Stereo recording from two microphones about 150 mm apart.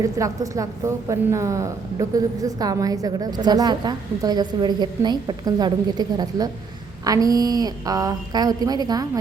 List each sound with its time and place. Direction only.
0.0 s a woman's voice: 20° right (ahead or behind)